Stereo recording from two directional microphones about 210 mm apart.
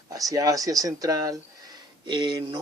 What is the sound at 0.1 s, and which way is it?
Speech, 15° right (ahead or behind).